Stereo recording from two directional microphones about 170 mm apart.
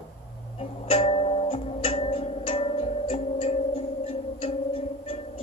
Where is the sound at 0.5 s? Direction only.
35° left (ahead or behind).